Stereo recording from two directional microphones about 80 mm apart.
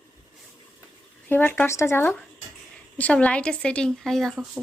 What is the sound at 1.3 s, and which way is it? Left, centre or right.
Speech, left.